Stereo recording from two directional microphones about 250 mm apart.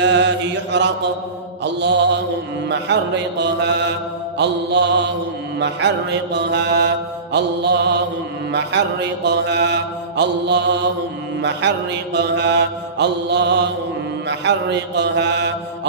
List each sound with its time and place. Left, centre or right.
0.0 s mantra: right